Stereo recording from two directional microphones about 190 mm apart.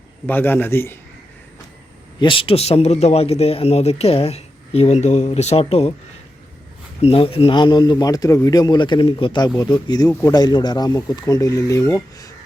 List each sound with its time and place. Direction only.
0.3 s speech: 10° left (ahead or behind)
2.1 s speech: 25° left (ahead or behind)
7.0 s speech: 30° left (ahead or behind)